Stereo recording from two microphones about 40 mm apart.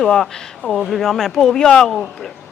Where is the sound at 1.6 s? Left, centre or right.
Centre.